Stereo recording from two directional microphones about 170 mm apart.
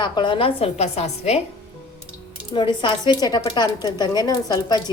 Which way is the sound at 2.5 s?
30° left (ahead or behind).